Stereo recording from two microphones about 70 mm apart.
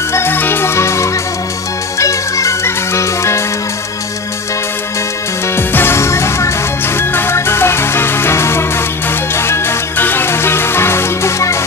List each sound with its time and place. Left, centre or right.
0.1 s music: left
5.6 s music: left